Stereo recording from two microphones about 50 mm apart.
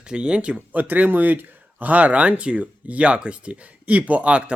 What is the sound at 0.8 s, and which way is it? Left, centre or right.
Speech, right.